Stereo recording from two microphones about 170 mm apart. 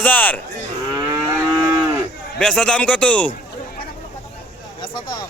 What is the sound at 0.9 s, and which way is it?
Livestock, 20° right (ahead or behind).